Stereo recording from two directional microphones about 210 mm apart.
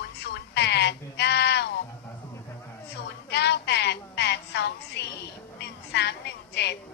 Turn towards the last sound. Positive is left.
turn(degrees=55)  # may be behind; listen again after turning